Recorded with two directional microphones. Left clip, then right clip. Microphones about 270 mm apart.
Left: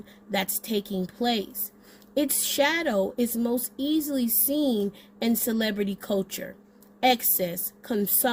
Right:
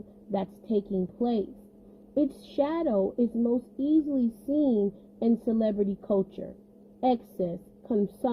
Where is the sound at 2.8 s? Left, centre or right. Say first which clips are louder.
Left 1 dB; left.